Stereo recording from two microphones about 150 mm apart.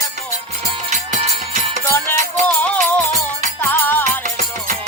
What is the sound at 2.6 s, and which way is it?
Music, 10° left (ahead or behind).